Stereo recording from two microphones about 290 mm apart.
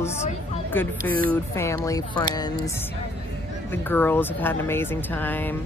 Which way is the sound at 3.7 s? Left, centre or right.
Centre.